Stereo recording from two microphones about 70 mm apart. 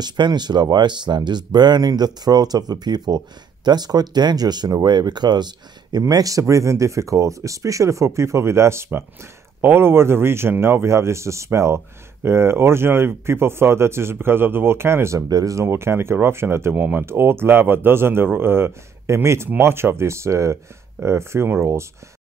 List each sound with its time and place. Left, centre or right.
0.0 s speech: right
15.2 s speech: right
15.6 s speech: right
16.7 s speech: right
17.0 s speech: right